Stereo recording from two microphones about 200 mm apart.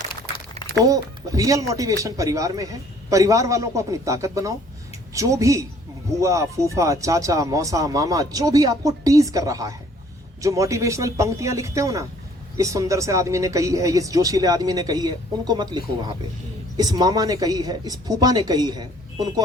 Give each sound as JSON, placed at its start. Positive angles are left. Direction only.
{"t": 0.9, "sound": "speech", "side_deg": -15}